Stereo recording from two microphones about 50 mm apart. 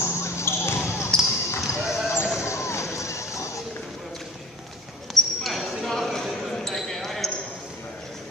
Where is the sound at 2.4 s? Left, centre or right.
Left.